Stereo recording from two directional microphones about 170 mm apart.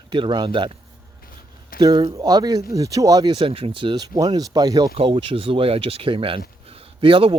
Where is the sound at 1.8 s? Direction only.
25° right (ahead or behind).